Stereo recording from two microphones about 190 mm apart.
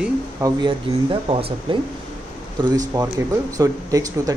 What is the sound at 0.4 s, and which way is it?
Speech, 25° right (ahead or behind).